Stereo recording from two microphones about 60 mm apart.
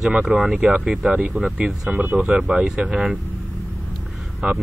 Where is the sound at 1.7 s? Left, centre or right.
Centre.